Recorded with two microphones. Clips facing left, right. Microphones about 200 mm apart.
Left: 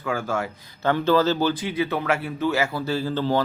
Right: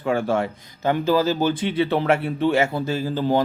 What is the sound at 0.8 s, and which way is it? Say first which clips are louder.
Speech: even; 15° right (ahead or behind).